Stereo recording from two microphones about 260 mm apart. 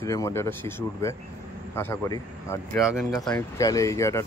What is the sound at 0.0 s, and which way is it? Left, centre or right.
Speech, centre.